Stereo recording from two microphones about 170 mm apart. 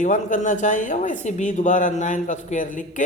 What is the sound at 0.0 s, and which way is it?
Speech, 50° left (ahead or behind).